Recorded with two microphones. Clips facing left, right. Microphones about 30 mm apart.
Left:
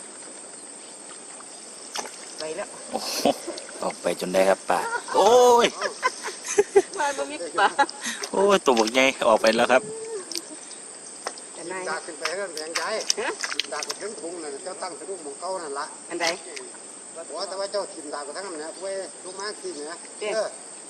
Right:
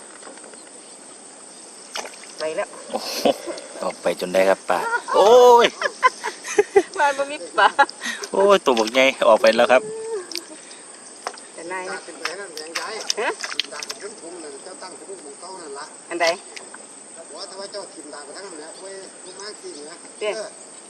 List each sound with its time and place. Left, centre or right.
1.9 s rowboat: centre
2.7 s speech: centre
6.0 s a sound: centre
7.5 s speech: centre
11.3 s a sound: centre
12.5 s speech: centre
14.4 s speech: centre
16.0 s speech: right
17.4 s speech: centre